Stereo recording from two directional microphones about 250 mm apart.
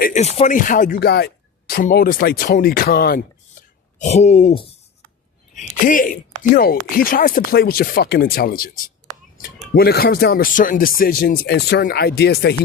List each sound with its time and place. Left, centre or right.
0.0 s speech: left
3.6 s a sound: left
3.9 s speech: left
9.7 s speech: left